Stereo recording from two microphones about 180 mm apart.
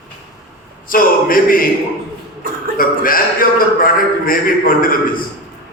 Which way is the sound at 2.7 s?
50° left (ahead or behind).